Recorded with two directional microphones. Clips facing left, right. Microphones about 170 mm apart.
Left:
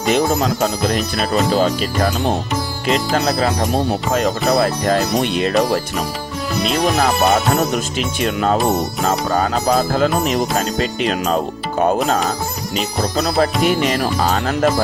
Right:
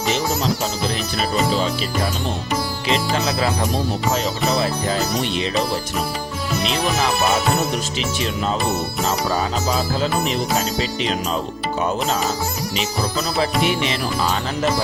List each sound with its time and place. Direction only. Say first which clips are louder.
0.1 s speech: left 6 dB; 55° left (ahead or behind)
4.1 s speech: left 6 dB; 55° left (ahead or behind)
6.9 s speech: left 4 dB; 45° left (ahead or behind)